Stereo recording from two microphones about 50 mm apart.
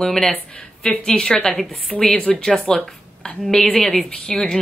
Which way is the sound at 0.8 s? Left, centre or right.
Centre.